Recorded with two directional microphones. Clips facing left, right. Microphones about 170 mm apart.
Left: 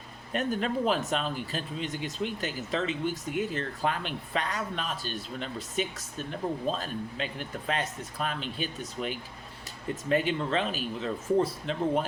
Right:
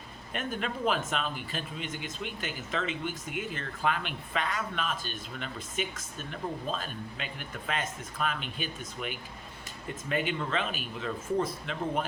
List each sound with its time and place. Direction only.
0.3 s speech: 40° left (ahead or behind)